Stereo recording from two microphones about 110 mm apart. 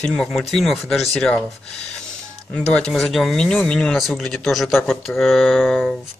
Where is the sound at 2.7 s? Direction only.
5° left (ahead or behind).